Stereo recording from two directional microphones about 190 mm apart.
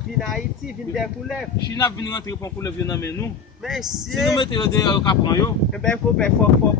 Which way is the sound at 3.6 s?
Centre (ahead or behind).